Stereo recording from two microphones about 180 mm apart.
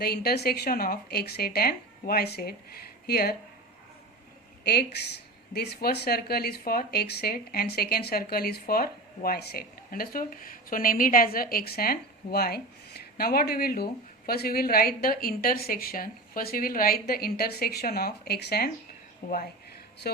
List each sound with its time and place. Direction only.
0.0 s speech: 60° left (ahead or behind)
4.6 s speech: 65° left (ahead or behind)
19.2 s speech: 50° left (ahead or behind)